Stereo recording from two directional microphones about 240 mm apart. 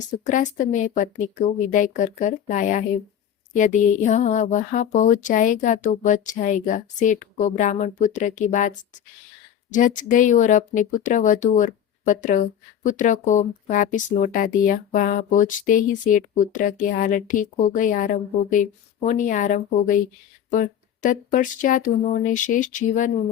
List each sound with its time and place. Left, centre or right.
0.1 s speech: left